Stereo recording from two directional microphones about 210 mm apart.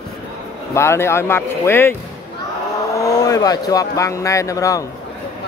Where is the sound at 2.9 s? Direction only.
15° left (ahead or behind).